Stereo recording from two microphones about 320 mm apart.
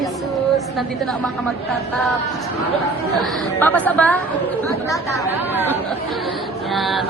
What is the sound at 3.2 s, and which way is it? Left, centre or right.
A woman's voice, centre.